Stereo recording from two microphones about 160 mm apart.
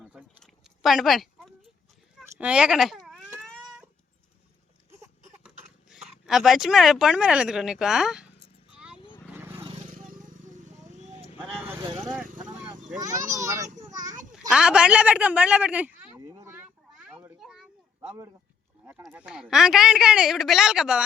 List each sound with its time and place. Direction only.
0.0 s a sound: centre (ahead or behind)
2.2 s speech: 5° right (ahead or behind)
3.4 s cat: centre (ahead or behind)
5.9 s speech: 5° right (ahead or behind)
8.7 s wild animals: 5° right (ahead or behind)
9.0 s vehicle: 30° left (ahead or behind)
9.3 s vehicle: 15° right (ahead or behind)
11.4 s vehicle: centre (ahead or behind)
11.9 s vehicle: 15° right (ahead or behind)
13.0 s a child's voice: 20° right (ahead or behind)
14.3 s a man's voice: 5° right (ahead or behind)
17.0 s children playing: 10° right (ahead or behind)
17.4 s a sound: centre (ahead or behind)
19.0 s a woman's voice: 5° right (ahead or behind)